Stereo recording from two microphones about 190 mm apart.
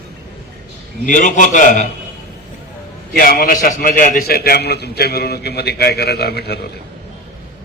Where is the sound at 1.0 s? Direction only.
45° left (ahead or behind).